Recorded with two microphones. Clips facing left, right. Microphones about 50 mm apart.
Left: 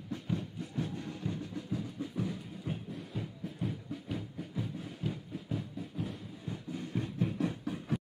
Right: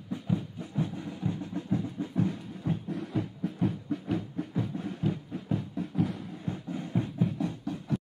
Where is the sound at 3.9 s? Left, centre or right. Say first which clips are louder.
Right 8 dB; right.